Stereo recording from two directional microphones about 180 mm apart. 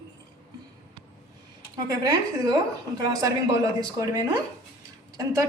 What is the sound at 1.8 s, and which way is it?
Speech, 20° right (ahead or behind).